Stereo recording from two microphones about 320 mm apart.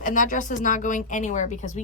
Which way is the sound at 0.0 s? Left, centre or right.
Left.